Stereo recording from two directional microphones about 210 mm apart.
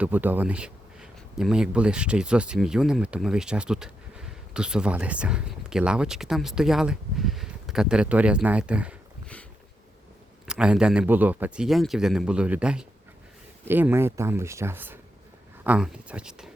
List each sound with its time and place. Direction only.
0.0 s speech: 10° right (ahead or behind)
10.4 s speech: 5° right (ahead or behind)